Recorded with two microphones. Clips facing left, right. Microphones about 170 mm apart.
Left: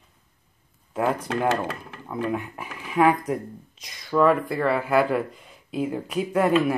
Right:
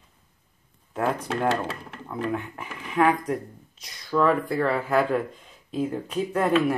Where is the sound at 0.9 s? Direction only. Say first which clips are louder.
Left 2 dB; 10° left (ahead or behind).